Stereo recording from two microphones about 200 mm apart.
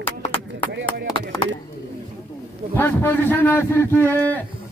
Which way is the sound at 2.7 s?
10° left (ahead or behind).